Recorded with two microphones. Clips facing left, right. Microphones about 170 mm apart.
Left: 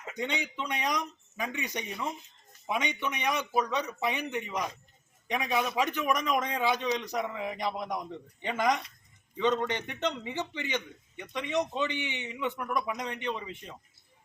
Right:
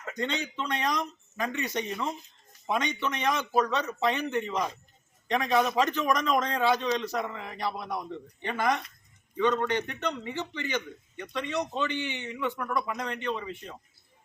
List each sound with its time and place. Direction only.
0.0 s a man's voice: 10° left (ahead or behind)